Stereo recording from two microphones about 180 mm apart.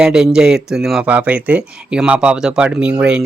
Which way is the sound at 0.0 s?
5° right (ahead or behind).